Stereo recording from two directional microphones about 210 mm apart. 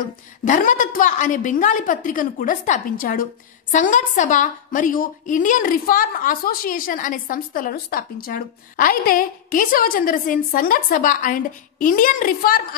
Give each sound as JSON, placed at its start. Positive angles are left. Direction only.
{"t": 0.0, "sound": "a woman's voice", "side_deg": 40}